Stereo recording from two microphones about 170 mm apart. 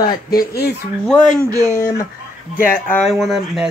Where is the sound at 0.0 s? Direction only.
55° left (ahead or behind).